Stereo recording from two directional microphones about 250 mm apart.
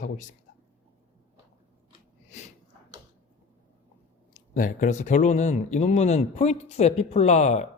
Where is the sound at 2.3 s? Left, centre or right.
Left.